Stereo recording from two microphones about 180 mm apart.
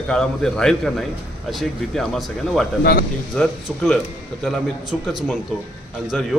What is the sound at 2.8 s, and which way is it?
Speech, 60° left (ahead or behind).